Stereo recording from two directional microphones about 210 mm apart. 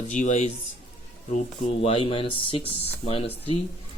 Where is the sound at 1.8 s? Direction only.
25° left (ahead or behind).